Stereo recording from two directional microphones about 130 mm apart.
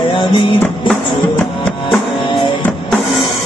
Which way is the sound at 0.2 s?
40° left (ahead or behind).